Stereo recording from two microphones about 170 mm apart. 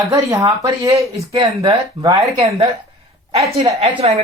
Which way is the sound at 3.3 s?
35° right (ahead or behind).